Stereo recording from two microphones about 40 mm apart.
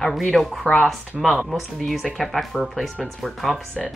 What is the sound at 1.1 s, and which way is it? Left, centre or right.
Speech, centre.